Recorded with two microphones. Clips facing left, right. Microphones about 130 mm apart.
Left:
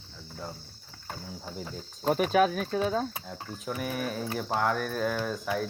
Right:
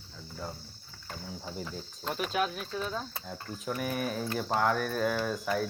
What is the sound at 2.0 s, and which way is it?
Speech, 50° left (ahead or behind).